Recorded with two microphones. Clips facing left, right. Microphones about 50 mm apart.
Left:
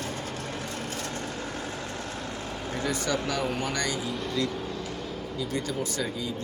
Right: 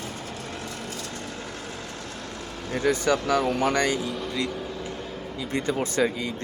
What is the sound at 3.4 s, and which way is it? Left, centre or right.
Speech, right.